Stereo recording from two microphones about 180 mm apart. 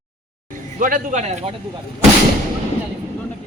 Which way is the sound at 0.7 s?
50° right (ahead or behind).